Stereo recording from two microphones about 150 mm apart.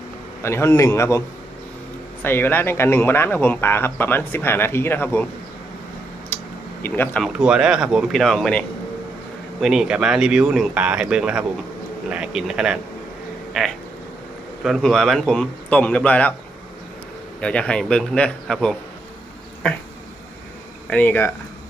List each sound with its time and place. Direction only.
0.4 s a man's voice: 20° left (ahead or behind)
2.2 s speech: 15° left (ahead or behind)
6.8 s speech: 15° left (ahead or behind)
7.2 s speech: 5° right (ahead or behind)
17.4 s speech: 5° left (ahead or behind)
20.9 s speech: 10° left (ahead or behind)